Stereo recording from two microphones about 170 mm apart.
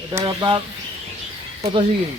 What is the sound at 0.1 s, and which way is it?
Speech, 20° right (ahead or behind).